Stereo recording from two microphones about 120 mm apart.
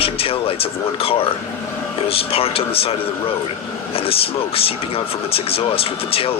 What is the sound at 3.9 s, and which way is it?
Speech, 50° left (ahead or behind).